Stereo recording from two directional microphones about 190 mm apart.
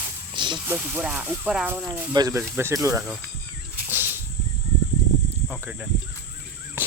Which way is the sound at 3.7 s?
10° right (ahead or behind).